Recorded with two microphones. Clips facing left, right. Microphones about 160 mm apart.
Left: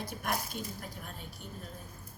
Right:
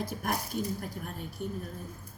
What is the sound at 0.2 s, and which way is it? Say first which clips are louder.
Speech: right 1 dB; 45° right (ahead or behind).